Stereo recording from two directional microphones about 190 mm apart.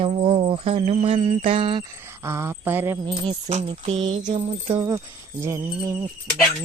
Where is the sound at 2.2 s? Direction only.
15° right (ahead or behind).